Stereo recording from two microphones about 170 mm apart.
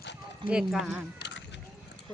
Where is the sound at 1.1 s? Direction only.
80° left.